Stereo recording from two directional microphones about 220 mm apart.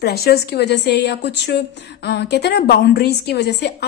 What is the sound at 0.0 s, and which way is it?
A woman's voice, 45° left (ahead or behind).